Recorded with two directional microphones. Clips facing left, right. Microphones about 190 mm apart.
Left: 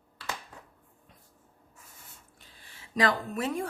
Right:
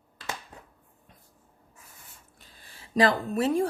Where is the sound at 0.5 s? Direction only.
20° right (ahead or behind).